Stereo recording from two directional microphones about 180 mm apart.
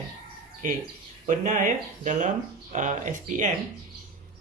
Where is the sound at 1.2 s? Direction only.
45° right (ahead or behind).